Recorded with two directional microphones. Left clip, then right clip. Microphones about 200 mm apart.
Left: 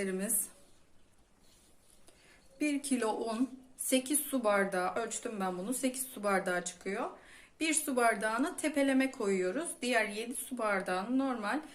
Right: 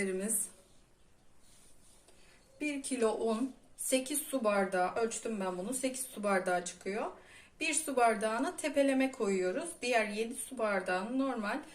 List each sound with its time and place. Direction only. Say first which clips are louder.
2.6 s speech: even; 35° left (ahead or behind)